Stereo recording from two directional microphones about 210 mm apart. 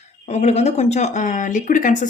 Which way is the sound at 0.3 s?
30° left (ahead or behind).